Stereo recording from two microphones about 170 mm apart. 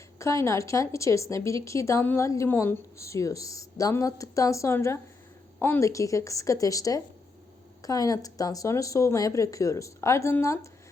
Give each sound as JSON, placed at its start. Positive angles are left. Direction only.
{"t": 0.2, "sound": "speech", "side_deg": 15}